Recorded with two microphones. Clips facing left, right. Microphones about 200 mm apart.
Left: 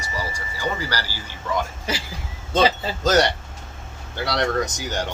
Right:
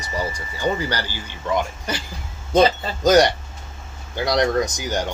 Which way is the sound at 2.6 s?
5° left (ahead or behind).